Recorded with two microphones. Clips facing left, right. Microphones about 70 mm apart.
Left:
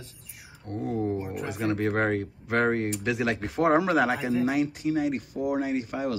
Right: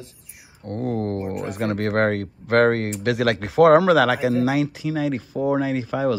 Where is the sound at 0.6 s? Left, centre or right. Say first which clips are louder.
Right 4 dB; right.